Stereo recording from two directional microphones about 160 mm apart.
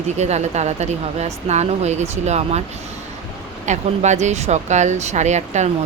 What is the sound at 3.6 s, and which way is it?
Speech, 45° right (ahead or behind).